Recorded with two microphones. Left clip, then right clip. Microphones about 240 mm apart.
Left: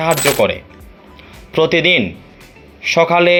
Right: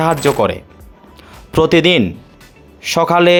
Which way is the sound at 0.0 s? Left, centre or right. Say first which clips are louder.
Even; right.